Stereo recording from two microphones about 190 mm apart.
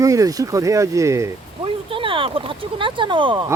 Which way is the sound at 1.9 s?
25° right (ahead or behind).